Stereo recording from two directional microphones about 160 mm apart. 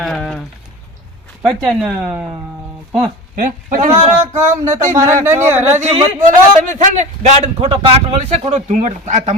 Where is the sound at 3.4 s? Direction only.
50° right (ahead or behind).